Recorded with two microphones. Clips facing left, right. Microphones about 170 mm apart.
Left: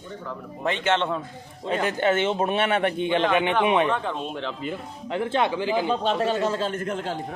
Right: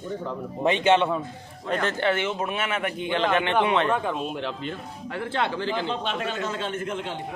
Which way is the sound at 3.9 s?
10° right (ahead or behind).